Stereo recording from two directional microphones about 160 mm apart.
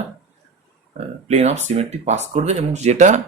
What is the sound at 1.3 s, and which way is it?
A man's voice, 45° right (ahead or behind).